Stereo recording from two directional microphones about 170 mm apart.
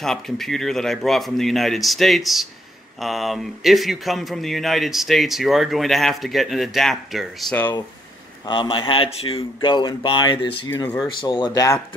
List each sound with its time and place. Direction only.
0.0 s a man's voice: centre (ahead or behind)
8.5 s speech: 30° left (ahead or behind)